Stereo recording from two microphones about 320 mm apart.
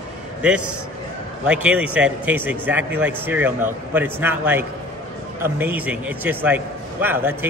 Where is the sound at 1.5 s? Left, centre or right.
Centre.